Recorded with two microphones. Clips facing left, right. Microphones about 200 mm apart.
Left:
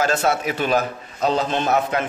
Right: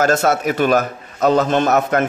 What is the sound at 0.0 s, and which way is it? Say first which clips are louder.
A man's voice: right 4 dB; 45° right (ahead or behind).